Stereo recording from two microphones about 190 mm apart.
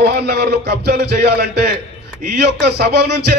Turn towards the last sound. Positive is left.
turn(degrees=-60)  # may be behind; listen again after turning